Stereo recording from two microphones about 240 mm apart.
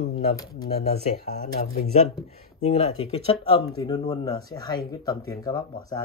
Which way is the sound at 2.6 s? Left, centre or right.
Left.